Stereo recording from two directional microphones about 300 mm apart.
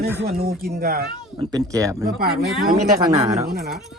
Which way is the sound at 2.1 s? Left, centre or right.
Right.